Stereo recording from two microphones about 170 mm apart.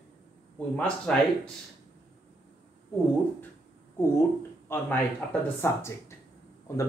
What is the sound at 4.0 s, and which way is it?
Speech, 15° left (ahead or behind).